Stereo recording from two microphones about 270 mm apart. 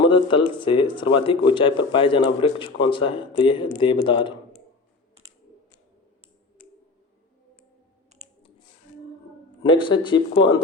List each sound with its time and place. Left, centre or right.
0.1 s speech: centre
9.6 s speech: centre